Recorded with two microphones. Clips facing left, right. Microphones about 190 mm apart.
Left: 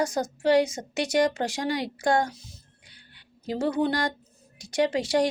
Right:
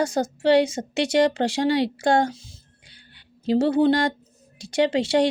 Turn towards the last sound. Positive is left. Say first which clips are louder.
# right 4 dB
turn(degrees=-25)  # may be behind; listen again after turning